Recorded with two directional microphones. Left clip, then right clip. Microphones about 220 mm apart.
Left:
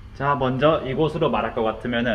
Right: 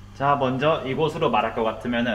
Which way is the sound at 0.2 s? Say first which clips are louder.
Left 1 dB; 35° left (ahead or behind).